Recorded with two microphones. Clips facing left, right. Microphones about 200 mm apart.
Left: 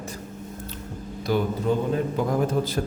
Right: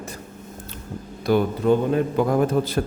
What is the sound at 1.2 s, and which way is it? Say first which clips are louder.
Speech: right 4 dB; 60° right (ahead or behind).